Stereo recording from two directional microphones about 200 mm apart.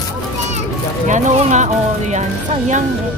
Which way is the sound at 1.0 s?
35° right (ahead or behind).